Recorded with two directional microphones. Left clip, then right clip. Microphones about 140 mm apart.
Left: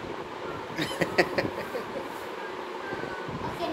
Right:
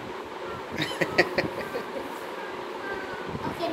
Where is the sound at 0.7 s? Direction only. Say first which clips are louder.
Right 2 dB; 15° left (ahead or behind).